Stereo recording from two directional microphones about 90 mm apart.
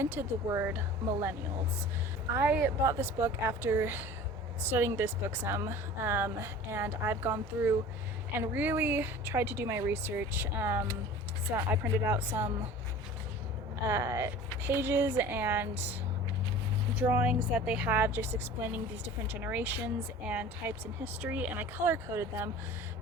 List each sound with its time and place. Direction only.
0.0 s a woman's voice: 25° right (ahead or behind)
2.5 s a woman's voice: 25° right (ahead or behind)
13.8 s speech: 35° right (ahead or behind)
14.3 s a woman's voice: 25° right (ahead or behind)
17.0 s a woman's voice: 15° right (ahead or behind)